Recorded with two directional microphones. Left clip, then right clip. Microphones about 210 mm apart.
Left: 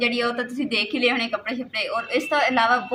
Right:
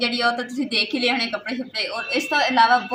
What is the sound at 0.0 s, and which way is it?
A woman's voice, 10° left (ahead or behind).